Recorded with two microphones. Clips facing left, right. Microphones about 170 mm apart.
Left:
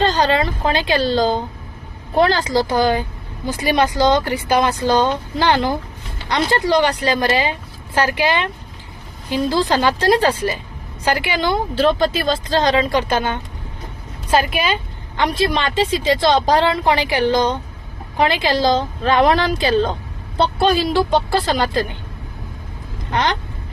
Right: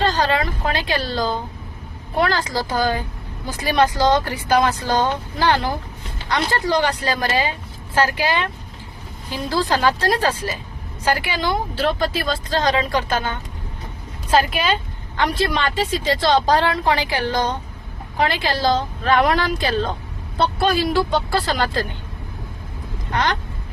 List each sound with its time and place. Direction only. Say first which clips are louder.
0.0 s a woman's voice: left 3 dB; 25° left (ahead or behind)
9.5 s a woman's voice: even; 20° left (ahead or behind)
23.1 s a woman's voice: left 2 dB; 20° left (ahead or behind)